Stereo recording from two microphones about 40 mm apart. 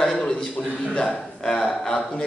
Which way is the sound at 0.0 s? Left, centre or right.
Centre.